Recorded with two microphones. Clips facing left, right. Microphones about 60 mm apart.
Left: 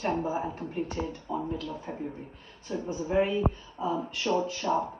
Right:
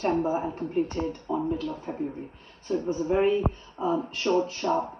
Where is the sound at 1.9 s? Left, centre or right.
Centre.